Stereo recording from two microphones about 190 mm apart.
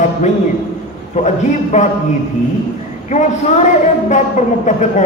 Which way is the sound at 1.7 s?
35° left (ahead or behind).